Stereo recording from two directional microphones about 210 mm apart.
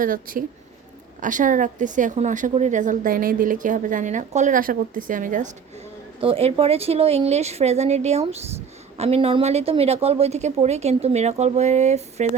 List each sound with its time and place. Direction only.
0.0 s a woman's voice: 40° right (ahead or behind)
6.1 s a woman's voice: 25° right (ahead or behind)